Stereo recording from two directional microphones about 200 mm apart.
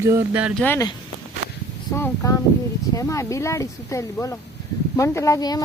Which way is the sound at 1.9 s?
15° left (ahead or behind).